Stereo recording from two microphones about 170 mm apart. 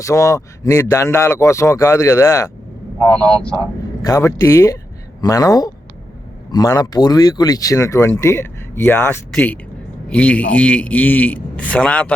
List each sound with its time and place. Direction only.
0.0 s speech: 20° left (ahead or behind)
3.2 s speech: 5° left (ahead or behind)
4.0 s speech: 20° left (ahead or behind)